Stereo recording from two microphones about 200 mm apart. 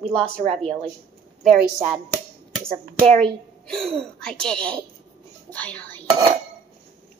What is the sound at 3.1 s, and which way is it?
A woman's voice, 5° left (ahead or behind).